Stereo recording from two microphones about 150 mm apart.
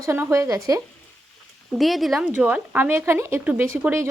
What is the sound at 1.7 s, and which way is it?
A woman's voice, centre (ahead or behind).